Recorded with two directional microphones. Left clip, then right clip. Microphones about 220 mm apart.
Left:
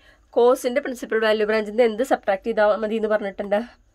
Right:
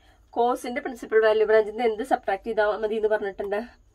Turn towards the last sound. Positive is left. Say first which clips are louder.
# left 5 dB
turn(degrees=50)  # may be behind; listen again after turning